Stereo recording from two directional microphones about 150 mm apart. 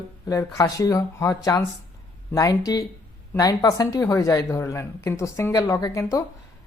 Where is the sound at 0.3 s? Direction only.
20° left (ahead or behind).